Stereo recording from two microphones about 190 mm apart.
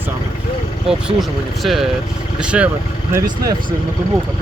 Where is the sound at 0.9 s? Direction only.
Centre (ahead or behind).